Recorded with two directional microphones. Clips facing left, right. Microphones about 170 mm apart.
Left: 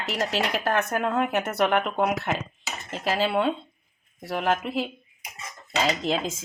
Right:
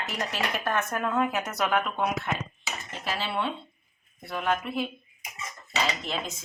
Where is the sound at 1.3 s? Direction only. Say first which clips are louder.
Left 4 dB; 60° left (ahead or behind).